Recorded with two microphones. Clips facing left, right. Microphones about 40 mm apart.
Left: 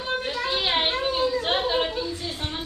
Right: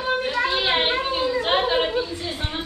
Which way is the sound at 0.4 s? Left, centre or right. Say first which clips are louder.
Right 2 dB; right.